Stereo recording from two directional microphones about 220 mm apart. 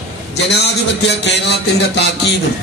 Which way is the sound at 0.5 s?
50° left (ahead or behind).